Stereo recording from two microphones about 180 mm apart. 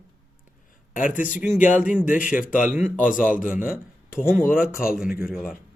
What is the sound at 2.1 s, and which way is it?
A man's voice, 50° left (ahead or behind).